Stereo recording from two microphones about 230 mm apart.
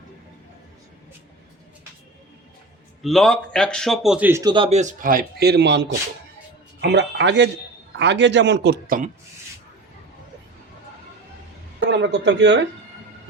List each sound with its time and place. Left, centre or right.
3.0 s a man's voice: centre; by 9.0 s right
11.9 s a man's voice: right